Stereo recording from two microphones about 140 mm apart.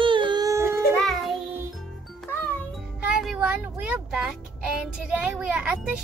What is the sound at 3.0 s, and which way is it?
A woman's voice, 10° right (ahead or behind).